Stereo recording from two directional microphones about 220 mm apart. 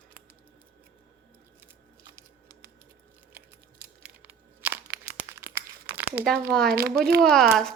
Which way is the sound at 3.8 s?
5° right (ahead or behind).